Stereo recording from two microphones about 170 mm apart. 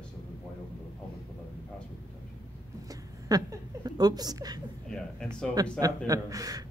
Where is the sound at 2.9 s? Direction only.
20° right (ahead or behind).